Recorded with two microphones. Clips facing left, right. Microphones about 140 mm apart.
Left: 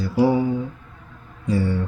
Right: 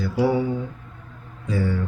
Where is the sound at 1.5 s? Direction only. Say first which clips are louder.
Left 3 dB; 30° left (ahead or behind).